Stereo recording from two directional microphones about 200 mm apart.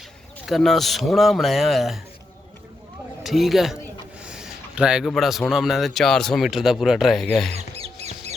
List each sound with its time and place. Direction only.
0.4 s a man's voice: centre (ahead or behind)
3.2 s a man's voice: centre (ahead or behind)
7.5 s music: 30° right (ahead or behind)